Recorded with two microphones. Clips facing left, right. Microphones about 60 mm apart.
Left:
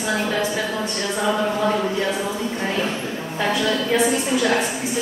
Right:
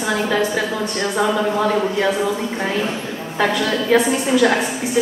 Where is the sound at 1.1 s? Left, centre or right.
Right.